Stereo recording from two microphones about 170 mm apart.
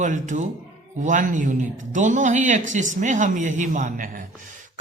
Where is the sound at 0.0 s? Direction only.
45° right (ahead or behind).